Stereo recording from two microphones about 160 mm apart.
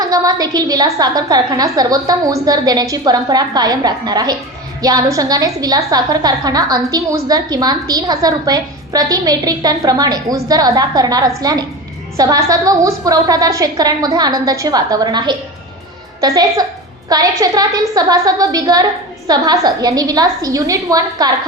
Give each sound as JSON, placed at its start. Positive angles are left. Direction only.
{"t": 0.0, "sound": "a woman's voice", "side_deg": -25}